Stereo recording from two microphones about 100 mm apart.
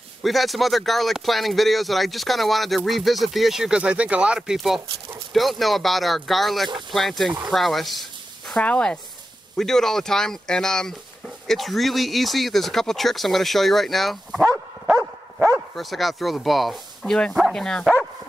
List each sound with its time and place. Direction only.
0.2 s speech: centre (ahead or behind)
8.5 s speech: 10° left (ahead or behind); by 14.5 s 5° right (ahead or behind)
15.3 s dog: 15° right (ahead or behind)
15.7 s speech: centre (ahead or behind)